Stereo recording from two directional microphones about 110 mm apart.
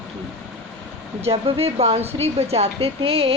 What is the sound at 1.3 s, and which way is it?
Speech, 60° right (ahead or behind).